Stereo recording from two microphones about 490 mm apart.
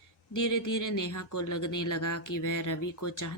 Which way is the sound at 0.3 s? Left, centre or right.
Left.